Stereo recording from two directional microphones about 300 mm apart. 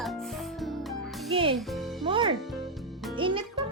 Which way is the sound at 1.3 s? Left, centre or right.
Centre.